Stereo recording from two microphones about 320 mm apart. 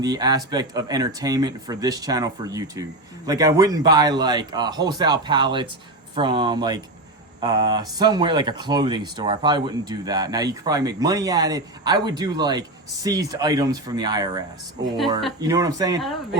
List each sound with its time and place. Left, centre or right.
0.0 s speech: centre